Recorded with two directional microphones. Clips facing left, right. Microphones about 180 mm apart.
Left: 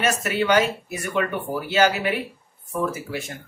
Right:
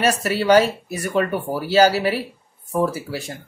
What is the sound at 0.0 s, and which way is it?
Speech, 35° right (ahead or behind).